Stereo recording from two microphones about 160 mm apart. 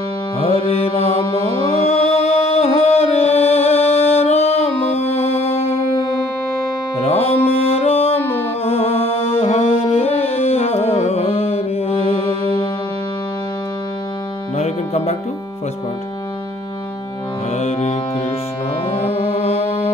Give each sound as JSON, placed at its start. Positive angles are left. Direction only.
{"t": 0.4, "sound": "music", "side_deg": 35}
{"t": 7.1, "sound": "music", "side_deg": 40}
{"t": 8.2, "sound": "music", "side_deg": 10}
{"t": 8.6, "sound": "music", "side_deg": 40}
{"t": 14.6, "sound": "music", "side_deg": 40}
{"t": 17.6, "sound": "music", "side_deg": 45}